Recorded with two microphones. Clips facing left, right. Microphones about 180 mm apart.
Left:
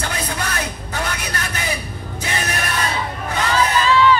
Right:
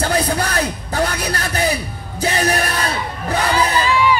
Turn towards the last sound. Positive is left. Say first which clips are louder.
# left 1 dB
turn(degrees=-10)  # may be behind; listen again after turning